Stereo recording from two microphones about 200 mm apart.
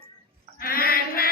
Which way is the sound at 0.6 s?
45° left (ahead or behind).